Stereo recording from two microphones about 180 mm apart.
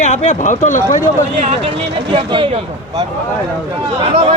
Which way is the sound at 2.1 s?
30° right (ahead or behind).